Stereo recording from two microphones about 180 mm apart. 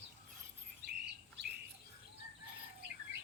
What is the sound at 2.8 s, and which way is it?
Bird, 70° right (ahead or behind).